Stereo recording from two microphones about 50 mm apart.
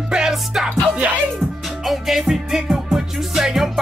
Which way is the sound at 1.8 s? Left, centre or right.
Centre.